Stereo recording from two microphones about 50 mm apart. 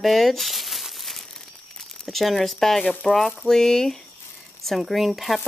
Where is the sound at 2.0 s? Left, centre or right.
Centre.